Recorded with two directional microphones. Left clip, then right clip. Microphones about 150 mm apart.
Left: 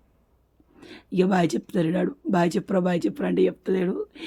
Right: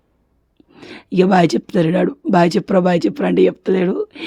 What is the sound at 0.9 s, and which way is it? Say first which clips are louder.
Speech: right 9 dB; 35° right (ahead or behind).